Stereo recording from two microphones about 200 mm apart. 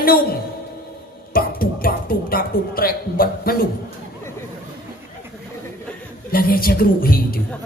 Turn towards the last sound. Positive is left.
turn(degrees=45)  # may be behind; listen again after turning